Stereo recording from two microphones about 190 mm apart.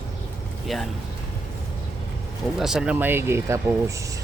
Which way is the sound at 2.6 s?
5° right (ahead or behind).